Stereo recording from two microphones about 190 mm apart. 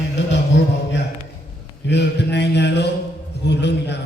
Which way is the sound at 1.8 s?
65° left (ahead or behind).